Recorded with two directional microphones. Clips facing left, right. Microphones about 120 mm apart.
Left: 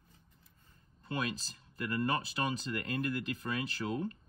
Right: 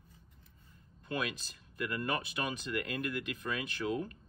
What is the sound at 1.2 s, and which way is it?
Speech, 35° left (ahead or behind).